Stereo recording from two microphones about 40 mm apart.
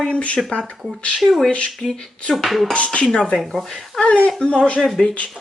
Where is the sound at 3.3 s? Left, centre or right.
Centre.